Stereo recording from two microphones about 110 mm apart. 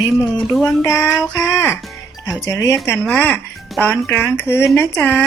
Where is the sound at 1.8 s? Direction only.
Centre (ahead or behind).